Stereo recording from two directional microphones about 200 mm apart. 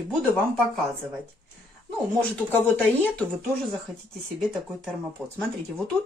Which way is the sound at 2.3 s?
10° left (ahead or behind).